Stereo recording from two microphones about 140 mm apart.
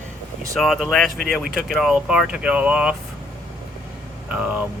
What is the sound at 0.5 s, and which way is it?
Speech, centre (ahead or behind).